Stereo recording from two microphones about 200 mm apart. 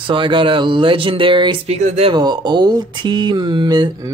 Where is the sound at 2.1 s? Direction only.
20° right (ahead or behind).